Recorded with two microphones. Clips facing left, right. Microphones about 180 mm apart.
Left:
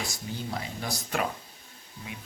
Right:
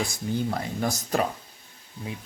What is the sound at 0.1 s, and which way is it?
Speech, 50° right (ahead or behind).